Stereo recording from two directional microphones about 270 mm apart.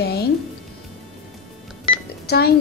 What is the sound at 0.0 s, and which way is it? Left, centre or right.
Music, left.